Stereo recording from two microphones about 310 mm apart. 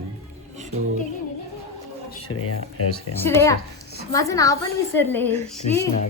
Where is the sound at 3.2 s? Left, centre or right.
Centre.